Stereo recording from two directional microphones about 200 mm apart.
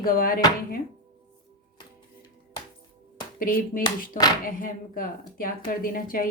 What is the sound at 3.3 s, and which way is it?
A woman's voice, 45° left (ahead or behind).